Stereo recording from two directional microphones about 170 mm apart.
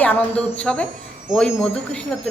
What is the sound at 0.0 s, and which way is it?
A woman's voice, 10° left (ahead or behind).